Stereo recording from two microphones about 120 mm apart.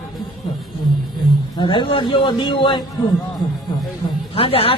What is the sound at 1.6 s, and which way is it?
A man's voice, 40° left (ahead or behind).